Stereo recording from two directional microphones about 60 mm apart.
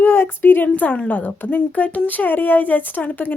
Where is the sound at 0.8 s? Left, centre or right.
Left.